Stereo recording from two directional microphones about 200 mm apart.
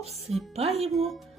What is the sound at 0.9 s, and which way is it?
Speech, centre (ahead or behind).